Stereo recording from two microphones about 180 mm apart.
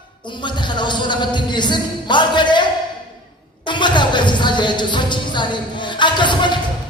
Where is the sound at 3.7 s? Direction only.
25° left (ahead or behind).